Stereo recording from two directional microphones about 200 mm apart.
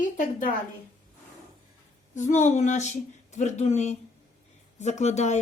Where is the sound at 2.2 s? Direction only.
40° left (ahead or behind).